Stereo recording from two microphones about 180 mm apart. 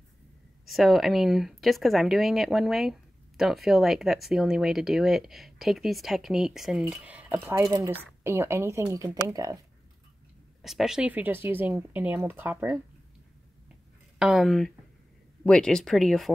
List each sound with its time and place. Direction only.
0.7 s speech: centre (ahead or behind); by 9.6 s 20° right (ahead or behind)
10.6 s speech: centre (ahead or behind)
14.1 s speech: 5° right (ahead or behind)